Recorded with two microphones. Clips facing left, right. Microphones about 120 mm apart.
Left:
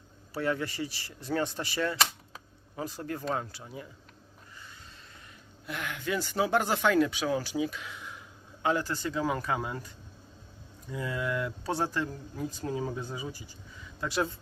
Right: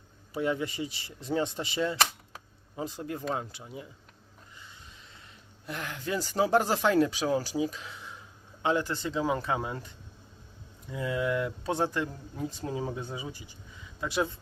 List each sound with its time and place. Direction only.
0.3 s speech: 20° right (ahead or behind)
5.6 s speech: 35° right (ahead or behind)
10.9 s speech: 20° right (ahead or behind)